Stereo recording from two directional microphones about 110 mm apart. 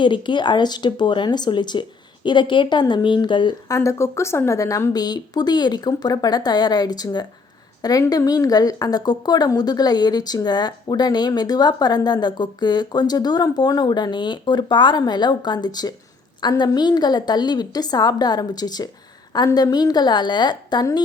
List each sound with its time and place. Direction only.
0.0 s speech: 45° left (ahead or behind)
3.7 s a woman's voice: 25° left (ahead or behind)